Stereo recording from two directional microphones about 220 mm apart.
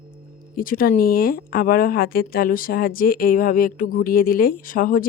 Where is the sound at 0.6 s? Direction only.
40° left (ahead or behind).